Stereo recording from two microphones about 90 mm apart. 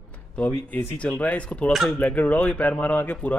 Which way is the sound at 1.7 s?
Centre (ahead or behind).